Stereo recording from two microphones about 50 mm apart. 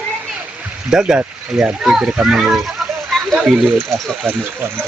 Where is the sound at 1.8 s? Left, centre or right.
Centre.